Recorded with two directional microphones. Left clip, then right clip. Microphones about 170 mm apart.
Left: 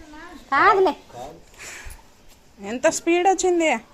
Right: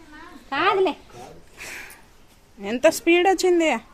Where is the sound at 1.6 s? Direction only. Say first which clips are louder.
Right 3 dB; 30° right (ahead or behind).